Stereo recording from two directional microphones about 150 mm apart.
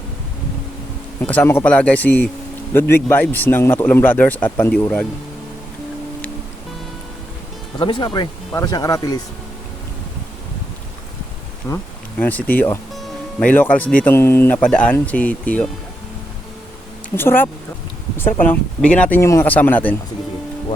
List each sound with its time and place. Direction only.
1.2 s speech: 10° left (ahead or behind)
7.8 s speech: 30° left (ahead or behind)
11.6 s speech: 20° left (ahead or behind)
17.2 s speech: 15° left (ahead or behind)